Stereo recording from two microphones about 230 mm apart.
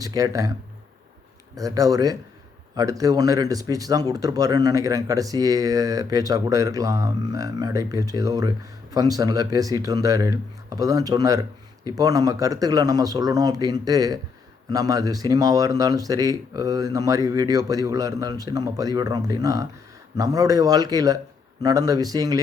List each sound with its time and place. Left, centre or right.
0.0 s speech: centre
1.5 s speech: centre